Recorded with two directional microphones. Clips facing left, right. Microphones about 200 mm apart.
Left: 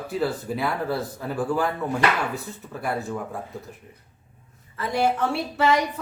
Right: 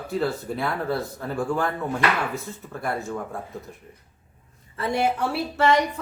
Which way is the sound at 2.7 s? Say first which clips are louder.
Left 1 dB; 5° left (ahead or behind).